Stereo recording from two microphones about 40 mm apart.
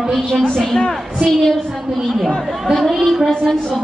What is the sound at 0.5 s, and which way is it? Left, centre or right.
Speech, centre.